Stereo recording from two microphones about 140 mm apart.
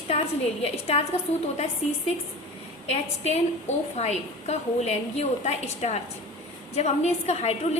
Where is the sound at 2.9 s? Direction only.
50° left (ahead or behind).